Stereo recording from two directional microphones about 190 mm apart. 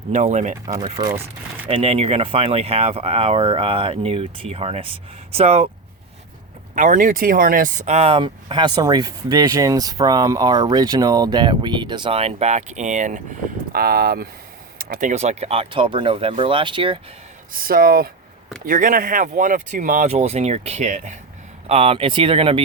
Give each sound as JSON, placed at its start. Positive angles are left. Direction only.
{"t": 0.1, "sound": "speech", "side_deg": -35}
{"t": 6.7, "sound": "speech", "side_deg": -45}
{"t": 13.7, "sound": "speech", "side_deg": -55}
{"t": 17.5, "sound": "speech", "side_deg": -50}